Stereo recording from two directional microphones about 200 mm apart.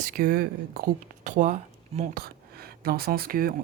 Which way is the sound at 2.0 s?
50° right (ahead or behind).